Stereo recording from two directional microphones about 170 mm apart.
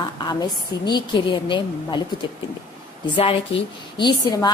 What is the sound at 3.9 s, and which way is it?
Speech, 25° left (ahead or behind).